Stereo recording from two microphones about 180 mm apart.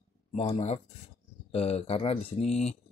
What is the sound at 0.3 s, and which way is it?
Speech, 35° left (ahead or behind).